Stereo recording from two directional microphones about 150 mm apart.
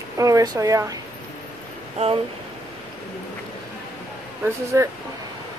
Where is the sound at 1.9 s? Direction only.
40° right (ahead or behind).